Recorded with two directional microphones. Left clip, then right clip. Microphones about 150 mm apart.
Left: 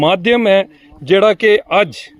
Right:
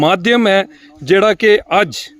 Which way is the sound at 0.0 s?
35° right (ahead or behind).